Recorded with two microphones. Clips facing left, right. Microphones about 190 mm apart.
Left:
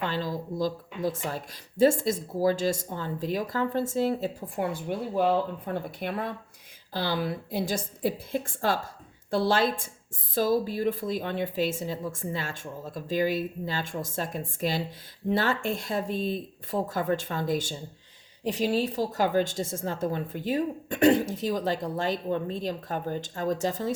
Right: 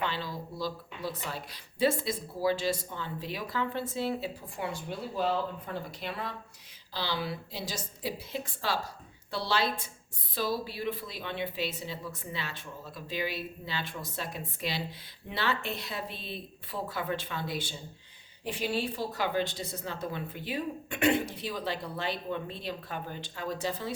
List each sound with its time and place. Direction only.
0.0 s speech: 45° left (ahead or behind)